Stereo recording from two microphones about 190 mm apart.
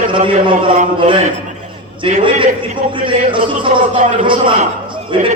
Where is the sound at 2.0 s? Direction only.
25° right (ahead or behind).